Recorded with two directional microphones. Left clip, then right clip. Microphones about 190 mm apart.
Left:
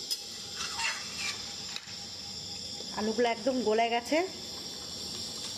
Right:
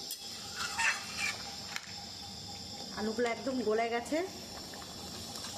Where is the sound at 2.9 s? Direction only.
20° left (ahead or behind).